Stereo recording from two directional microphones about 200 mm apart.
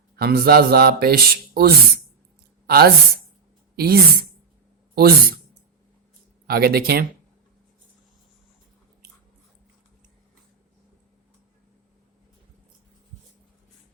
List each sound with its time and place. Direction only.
0.2 s speech: 50° right (ahead or behind)
6.5 s speech: 50° right (ahead or behind)